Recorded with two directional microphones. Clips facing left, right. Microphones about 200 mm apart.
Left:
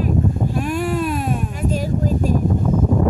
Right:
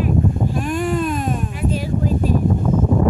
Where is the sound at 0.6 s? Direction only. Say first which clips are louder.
Even; 5° left (ahead or behind).